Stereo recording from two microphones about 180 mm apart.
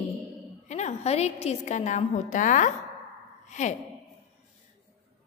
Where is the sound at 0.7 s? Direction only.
40° left (ahead or behind).